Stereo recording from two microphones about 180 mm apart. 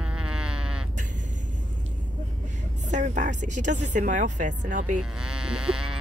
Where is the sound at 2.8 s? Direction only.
40° right (ahead or behind).